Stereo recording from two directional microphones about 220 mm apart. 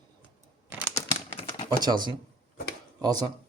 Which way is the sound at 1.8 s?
20° right (ahead or behind).